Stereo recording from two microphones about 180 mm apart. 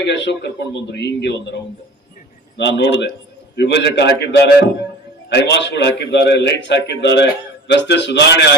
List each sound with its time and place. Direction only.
0.0 s a man's voice: 75° left (ahead or behind)
2.6 s a man's voice: 75° left (ahead or behind)